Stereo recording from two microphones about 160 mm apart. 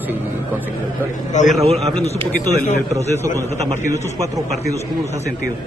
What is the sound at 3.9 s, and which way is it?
Speech, 20° right (ahead or behind).